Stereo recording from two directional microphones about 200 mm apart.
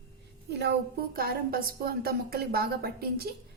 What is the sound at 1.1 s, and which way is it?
A woman's voice, 50° right (ahead or behind).